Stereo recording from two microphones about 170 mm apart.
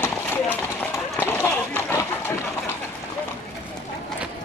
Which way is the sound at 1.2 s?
15° left (ahead or behind).